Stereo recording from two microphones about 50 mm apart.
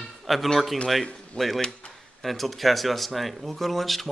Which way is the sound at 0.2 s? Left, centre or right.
Centre.